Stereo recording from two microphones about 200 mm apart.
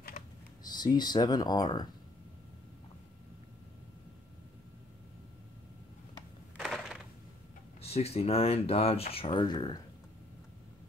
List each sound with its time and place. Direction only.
0.7 s speech: 20° left (ahead or behind)
6.5 s a sound: centre (ahead or behind)
7.8 s speech: 30° left (ahead or behind)